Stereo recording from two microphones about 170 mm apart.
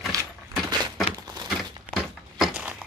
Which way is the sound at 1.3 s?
25° right (ahead or behind).